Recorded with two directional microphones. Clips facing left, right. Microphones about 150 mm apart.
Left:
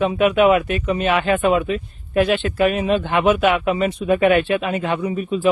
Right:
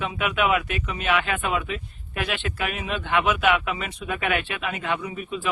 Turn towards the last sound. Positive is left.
turn(degrees=35)  # may be behind; listen again after turning